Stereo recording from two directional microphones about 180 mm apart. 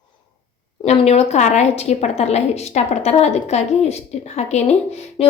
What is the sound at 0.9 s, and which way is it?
A woman's voice, 35° left (ahead or behind).